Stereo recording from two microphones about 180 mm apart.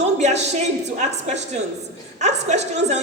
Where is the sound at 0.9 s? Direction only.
40° right (ahead or behind).